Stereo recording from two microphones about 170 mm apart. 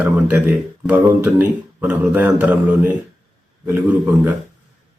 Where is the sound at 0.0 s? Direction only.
10° right (ahead or behind).